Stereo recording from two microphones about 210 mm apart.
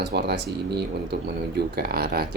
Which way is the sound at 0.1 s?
50° right (ahead or behind).